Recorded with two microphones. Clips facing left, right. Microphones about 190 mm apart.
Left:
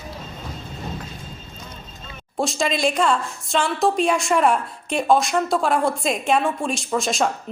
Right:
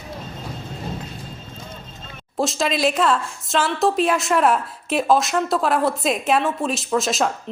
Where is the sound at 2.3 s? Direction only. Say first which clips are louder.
Right 1 dB; centre (ahead or behind).